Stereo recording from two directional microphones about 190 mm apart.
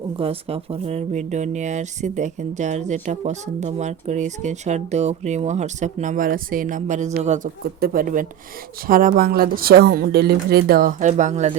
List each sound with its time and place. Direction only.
0.2 s speech: 30° right (ahead or behind)
7.6 s speech: 50° right (ahead or behind)